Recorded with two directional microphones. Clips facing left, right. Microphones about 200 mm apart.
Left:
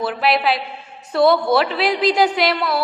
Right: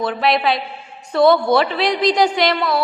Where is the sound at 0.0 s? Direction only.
5° left (ahead or behind).